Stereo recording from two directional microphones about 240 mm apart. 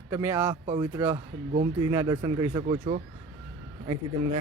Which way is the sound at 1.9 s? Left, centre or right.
Centre.